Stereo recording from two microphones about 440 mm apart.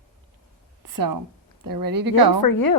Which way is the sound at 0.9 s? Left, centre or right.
Right.